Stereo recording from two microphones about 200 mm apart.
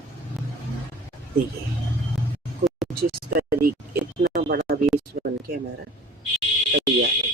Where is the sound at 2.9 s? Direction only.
50° right (ahead or behind).